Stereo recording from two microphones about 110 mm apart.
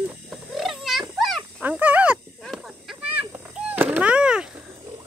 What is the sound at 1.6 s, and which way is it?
Dog, 15° right (ahead or behind).